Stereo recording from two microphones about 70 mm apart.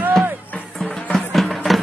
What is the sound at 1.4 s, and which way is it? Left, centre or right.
Music, centre.